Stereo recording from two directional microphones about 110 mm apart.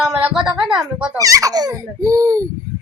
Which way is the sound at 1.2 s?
30° right (ahead or behind).